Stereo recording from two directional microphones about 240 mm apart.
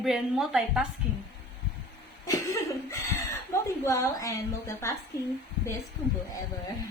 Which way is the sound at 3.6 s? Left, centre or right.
Centre.